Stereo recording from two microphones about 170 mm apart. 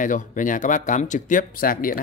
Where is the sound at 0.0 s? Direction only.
50° left (ahead or behind).